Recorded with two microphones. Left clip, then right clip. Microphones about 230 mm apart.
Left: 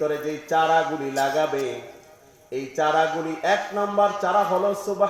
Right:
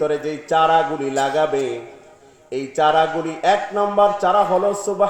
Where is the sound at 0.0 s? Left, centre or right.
Right.